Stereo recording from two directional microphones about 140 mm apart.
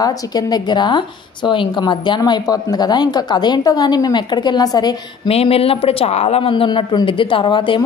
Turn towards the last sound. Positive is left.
turn(degrees=35)  # may be behind; listen again after turning